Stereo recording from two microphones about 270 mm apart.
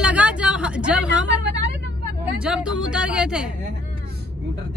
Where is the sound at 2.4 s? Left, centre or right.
Centre.